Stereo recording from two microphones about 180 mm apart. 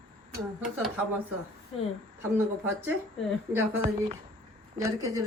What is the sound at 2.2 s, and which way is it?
Speech, 10° right (ahead or behind).